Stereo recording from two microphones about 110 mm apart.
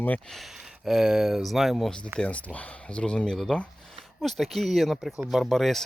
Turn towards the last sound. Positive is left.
turn(degrees=0)  # may be behind; listen again after turning